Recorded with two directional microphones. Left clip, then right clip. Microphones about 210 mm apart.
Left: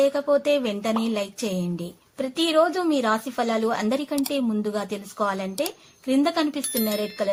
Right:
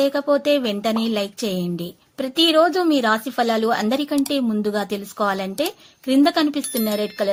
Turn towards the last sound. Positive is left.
turn(degrees=0)  # may be behind; listen again after turning